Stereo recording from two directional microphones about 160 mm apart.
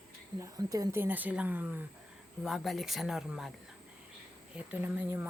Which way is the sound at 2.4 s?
Centre (ahead or behind).